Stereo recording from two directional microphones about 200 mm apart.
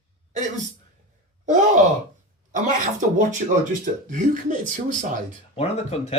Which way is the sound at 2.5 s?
40° right (ahead or behind).